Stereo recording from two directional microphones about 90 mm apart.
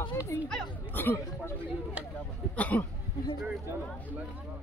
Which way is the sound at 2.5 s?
15° left (ahead or behind).